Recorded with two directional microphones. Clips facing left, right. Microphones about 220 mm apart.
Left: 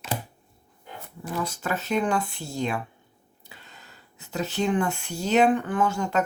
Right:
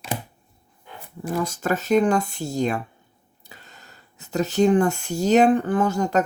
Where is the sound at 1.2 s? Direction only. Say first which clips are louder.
Right 5 dB; 45° right (ahead or behind).